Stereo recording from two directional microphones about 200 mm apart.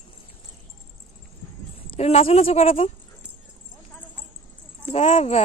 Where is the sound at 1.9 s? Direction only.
30° left (ahead or behind).